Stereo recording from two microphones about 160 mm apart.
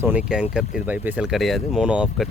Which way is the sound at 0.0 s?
10° right (ahead or behind).